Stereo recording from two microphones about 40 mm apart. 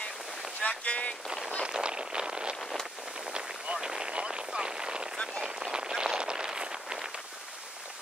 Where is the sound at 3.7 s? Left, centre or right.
Centre.